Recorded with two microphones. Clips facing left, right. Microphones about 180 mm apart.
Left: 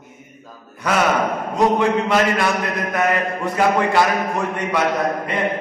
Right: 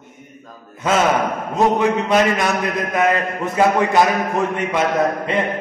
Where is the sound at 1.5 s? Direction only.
20° right (ahead or behind).